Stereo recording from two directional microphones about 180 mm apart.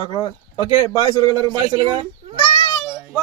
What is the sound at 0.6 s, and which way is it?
Speech, 15° right (ahead or behind).